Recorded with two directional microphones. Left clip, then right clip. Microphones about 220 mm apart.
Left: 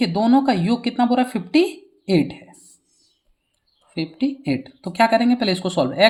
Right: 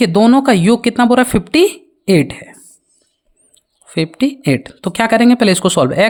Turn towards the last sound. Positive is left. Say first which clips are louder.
# right 6 dB
turn(degrees=-45)  # may be behind; listen again after turning